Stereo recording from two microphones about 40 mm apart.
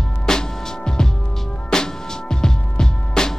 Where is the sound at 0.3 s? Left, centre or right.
Centre.